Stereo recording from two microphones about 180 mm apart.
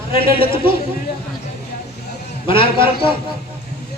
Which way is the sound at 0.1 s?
30° left (ahead or behind).